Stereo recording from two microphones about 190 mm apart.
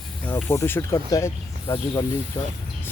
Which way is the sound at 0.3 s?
10° left (ahead or behind).